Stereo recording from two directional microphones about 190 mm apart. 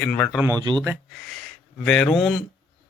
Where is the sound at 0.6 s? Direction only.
25° right (ahead or behind).